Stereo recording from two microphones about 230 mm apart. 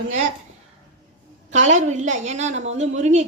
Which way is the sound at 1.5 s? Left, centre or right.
Right.